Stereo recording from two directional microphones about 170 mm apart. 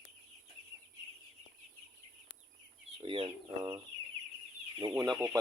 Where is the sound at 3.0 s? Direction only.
30° right (ahead or behind).